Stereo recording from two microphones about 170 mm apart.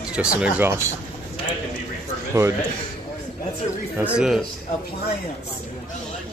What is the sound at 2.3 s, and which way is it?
Speech, 15° right (ahead or behind).